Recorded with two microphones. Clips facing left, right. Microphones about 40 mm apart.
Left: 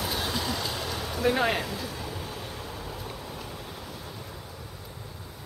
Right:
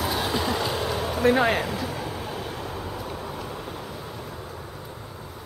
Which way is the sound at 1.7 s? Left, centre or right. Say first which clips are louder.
Right 5 dB; right.